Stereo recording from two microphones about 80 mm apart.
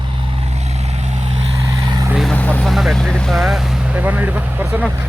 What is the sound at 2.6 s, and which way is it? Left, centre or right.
Speech, centre.